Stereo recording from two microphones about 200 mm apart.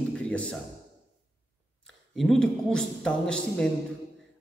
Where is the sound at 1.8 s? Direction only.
Centre (ahead or behind).